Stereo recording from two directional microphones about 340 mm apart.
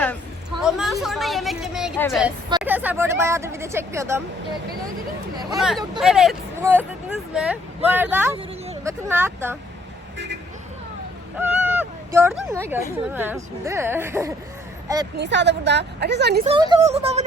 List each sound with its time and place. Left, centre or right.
0.6 s a sound: centre
2.6 s speech: centre
5.5 s speech: centre
11.3 s speech: centre
15.2 s a woman's voice: right
16.4 s speech: centre